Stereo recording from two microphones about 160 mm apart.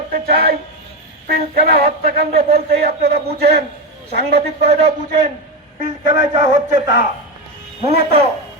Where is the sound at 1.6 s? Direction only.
75° right (ahead or behind).